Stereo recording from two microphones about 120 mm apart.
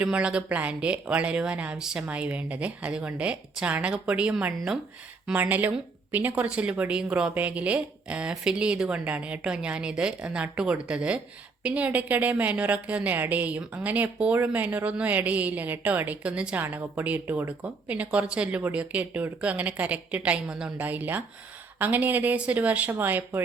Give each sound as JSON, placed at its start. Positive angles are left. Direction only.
{"t": 0.0, "sound": "a woman's voice", "side_deg": -10}
{"t": 16.6, "sound": "a woman's voice", "side_deg": -20}